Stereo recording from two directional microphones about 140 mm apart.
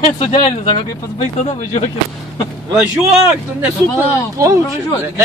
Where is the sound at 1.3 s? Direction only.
60° left (ahead or behind).